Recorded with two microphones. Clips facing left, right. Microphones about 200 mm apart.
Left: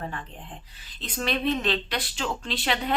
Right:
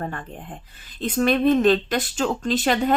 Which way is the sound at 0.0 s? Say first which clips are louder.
Right 5 dB; 50° right (ahead or behind).